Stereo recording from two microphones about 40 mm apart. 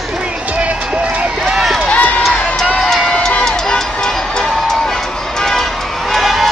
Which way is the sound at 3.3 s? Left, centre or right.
Centre.